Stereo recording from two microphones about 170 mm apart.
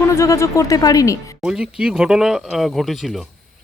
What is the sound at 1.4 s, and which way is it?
Speech, 5° right (ahead or behind).